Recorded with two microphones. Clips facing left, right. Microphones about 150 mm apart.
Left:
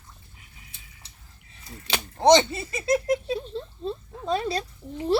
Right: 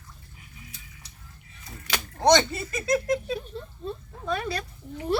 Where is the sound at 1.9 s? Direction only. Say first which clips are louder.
Left 3 dB; 25° left (ahead or behind).